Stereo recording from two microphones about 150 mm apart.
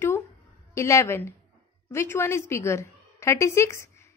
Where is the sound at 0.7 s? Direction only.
20° left (ahead or behind).